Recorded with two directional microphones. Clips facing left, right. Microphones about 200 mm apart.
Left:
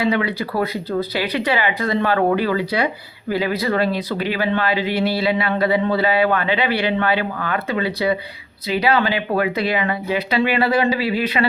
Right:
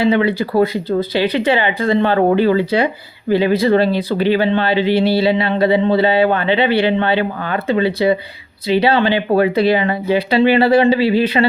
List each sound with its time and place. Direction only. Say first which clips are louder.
0.0 s speech: right 5 dB; 30° right (ahead or behind)